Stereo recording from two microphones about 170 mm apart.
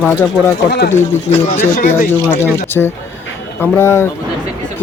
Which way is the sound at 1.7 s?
55° left (ahead or behind).